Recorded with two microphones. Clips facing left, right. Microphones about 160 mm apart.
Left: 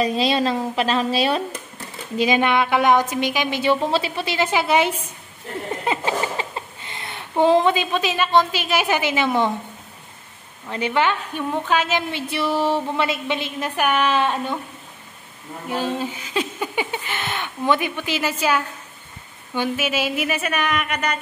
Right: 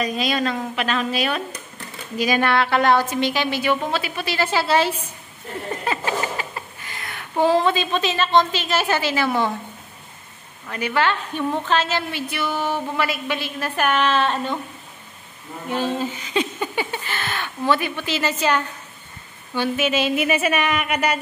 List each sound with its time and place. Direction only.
0.0 s a woman's voice: 30° left (ahead or behind)
10.7 s a woman's voice: 20° left (ahead or behind)
15.7 s speech: 10° left (ahead or behind); by 21.2 s 5° right (ahead or behind)